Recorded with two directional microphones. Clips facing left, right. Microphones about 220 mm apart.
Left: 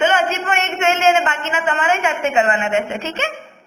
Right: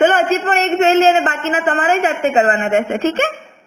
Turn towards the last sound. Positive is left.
turn(degrees=-50)  # may be behind; listen again after turning